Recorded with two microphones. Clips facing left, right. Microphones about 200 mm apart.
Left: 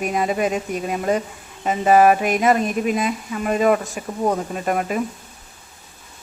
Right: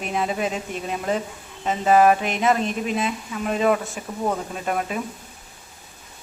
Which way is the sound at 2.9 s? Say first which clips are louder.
Left 3 dB; 5° left (ahead or behind).